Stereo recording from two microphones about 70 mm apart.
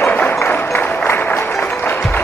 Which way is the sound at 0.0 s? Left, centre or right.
Left.